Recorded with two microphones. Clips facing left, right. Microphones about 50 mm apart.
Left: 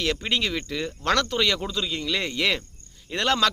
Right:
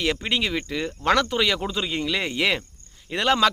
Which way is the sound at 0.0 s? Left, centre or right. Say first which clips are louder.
Right 1 dB; centre.